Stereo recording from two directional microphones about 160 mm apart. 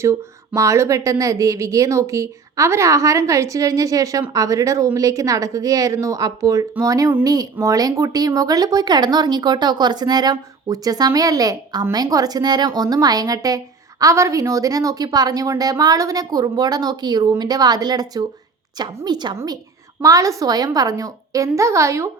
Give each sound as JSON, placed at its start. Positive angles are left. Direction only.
{"t": 0.0, "sound": "speech", "side_deg": -15}